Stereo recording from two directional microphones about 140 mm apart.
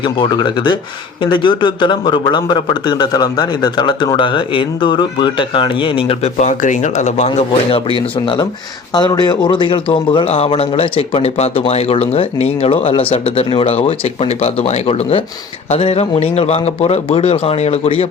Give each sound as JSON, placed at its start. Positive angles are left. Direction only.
{"t": 0.0, "sound": "a man's voice", "side_deg": 35}
{"t": 6.2, "sound": "speech", "side_deg": 55}
{"t": 7.3, "sound": "a man's voice", "side_deg": 40}